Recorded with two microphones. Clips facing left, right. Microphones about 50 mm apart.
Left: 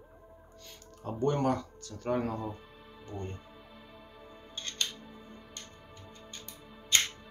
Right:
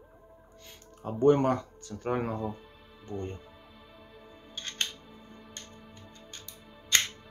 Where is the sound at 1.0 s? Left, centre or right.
Right.